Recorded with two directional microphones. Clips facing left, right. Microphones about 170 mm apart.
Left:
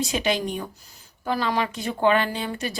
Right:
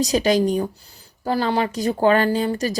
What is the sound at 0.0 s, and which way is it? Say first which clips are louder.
Speech: right 7 dB; 40° right (ahead or behind).